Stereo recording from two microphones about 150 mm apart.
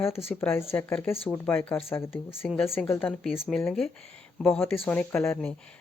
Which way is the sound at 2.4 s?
Centre (ahead or behind).